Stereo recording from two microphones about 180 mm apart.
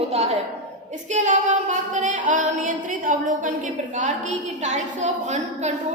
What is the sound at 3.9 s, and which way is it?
A woman's voice, 45° right (ahead or behind).